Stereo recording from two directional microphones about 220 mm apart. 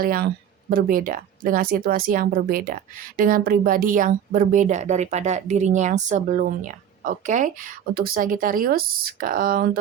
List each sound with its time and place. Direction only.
0.0 s speech: 40° right (ahead or behind)